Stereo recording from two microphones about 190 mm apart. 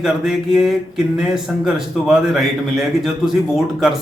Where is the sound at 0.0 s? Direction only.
Centre (ahead or behind).